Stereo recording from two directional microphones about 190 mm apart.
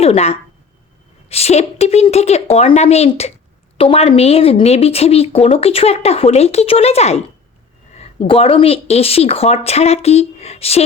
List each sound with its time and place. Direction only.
0.0 s speech: 35° left (ahead or behind)